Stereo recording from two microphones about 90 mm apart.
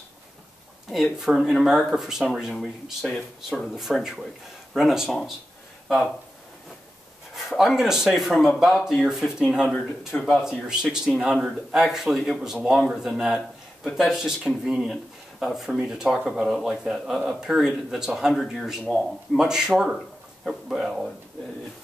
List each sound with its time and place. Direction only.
1.1 s speech: 5° right (ahead or behind)
7.3 s speech: centre (ahead or behind)
10.1 s speech: 15° left (ahead or behind)
10.7 s speech: 5° right (ahead or behind)